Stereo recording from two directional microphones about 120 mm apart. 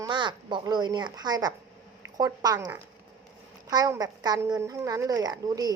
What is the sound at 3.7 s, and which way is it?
A woman's voice, 30° right (ahead or behind).